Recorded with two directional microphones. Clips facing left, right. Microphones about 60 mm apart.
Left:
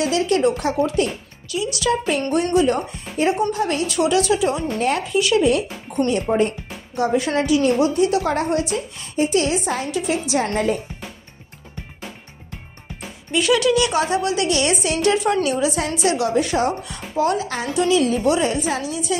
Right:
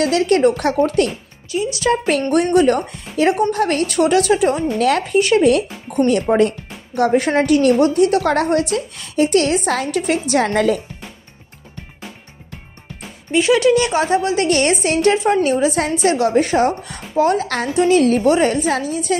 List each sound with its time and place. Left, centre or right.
0.0 s a woman's voice: right
1.5 s a woman's voice: right
2.3 s a woman's voice: right
4.7 s speech: right
5.0 s a woman's voice: right
5.9 s a woman's voice: right
6.3 s a woman's voice: right
13.3 s a woman's voice: right
17.7 s a woman's voice: right